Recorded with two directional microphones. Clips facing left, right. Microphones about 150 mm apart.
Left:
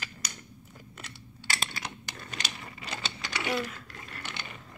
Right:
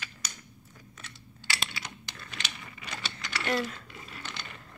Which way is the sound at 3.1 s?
10° left (ahead or behind).